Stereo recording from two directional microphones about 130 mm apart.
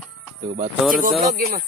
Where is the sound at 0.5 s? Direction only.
90° right.